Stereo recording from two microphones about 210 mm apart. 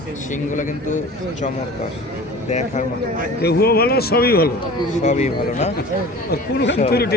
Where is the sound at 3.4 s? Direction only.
50° left (ahead or behind).